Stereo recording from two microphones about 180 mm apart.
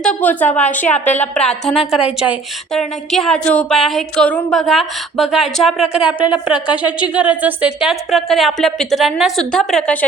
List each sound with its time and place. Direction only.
0.0 s a woman's voice: 5° left (ahead or behind)
0.9 s a woman's voice: 40° left (ahead or behind)
1.4 s a woman's voice: 5° left (ahead or behind)